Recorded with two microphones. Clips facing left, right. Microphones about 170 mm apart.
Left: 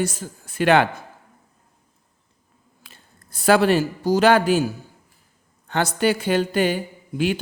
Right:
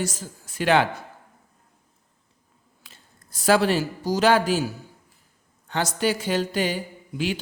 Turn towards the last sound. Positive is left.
turn(degrees=55)  # may be behind; listen again after turning